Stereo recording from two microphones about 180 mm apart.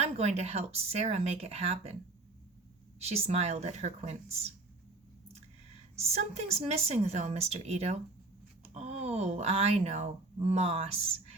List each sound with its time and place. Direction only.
0.0 s speech: 35° right (ahead or behind)
3.0 s speech: 35° right (ahead or behind)
6.0 s speech: 35° right (ahead or behind)